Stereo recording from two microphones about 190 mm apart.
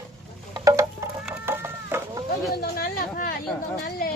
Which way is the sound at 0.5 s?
20° right (ahead or behind).